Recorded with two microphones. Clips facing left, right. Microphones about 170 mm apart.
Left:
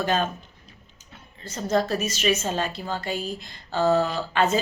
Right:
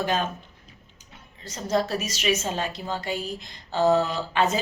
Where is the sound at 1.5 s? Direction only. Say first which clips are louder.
Left 2 dB; 10° right (ahead or behind).